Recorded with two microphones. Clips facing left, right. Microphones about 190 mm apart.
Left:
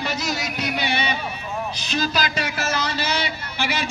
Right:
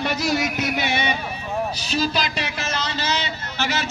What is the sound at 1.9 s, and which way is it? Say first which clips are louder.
A man's voice: left 1 dB; centre (ahead or behind).